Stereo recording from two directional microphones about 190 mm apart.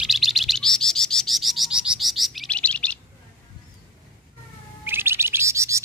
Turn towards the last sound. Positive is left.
turn(degrees=-15)  # may be behind; listen again after turning